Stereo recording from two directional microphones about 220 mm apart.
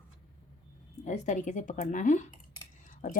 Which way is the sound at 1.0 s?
35° left (ahead or behind).